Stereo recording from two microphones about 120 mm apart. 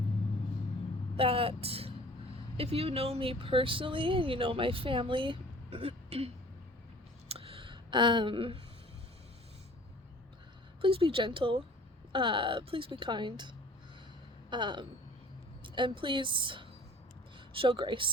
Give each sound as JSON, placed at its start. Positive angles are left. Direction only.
{"t": 1.1, "sound": "speech", "side_deg": -50}
{"t": 7.3, "sound": "clicking", "side_deg": -50}
{"t": 10.8, "sound": "speech", "side_deg": -50}
{"t": 14.5, "sound": "a woman's voice", "side_deg": -40}